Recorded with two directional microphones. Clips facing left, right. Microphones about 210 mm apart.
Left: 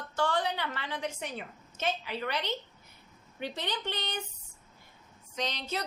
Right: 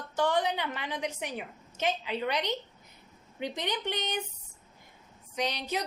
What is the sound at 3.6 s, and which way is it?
Speech, 15° right (ahead or behind).